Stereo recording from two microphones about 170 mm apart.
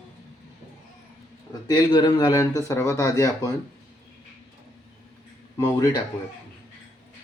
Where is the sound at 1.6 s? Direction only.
25° left (ahead or behind).